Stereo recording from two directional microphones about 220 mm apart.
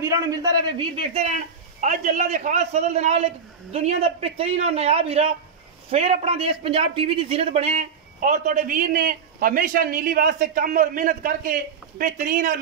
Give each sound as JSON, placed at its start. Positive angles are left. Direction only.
{"t": 0.0, "sound": "a man's voice", "side_deg": -15}
{"t": 1.8, "sound": "a man's voice", "side_deg": -35}